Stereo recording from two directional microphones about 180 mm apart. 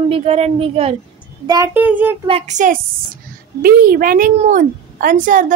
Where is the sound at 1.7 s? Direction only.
10° right (ahead or behind).